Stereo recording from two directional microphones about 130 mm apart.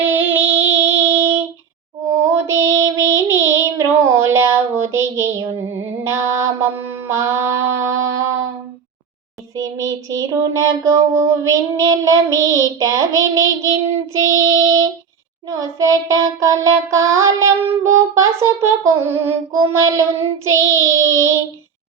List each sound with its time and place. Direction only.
0.0 s music: 15° right (ahead or behind)
2.2 s child singing: 20° right (ahead or behind)
9.6 s child singing: 25° right (ahead or behind)